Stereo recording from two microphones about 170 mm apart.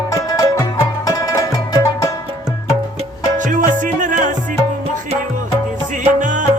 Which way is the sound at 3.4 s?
50° right (ahead or behind).